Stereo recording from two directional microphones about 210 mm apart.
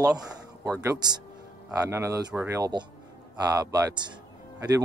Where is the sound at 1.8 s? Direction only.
15° right (ahead or behind).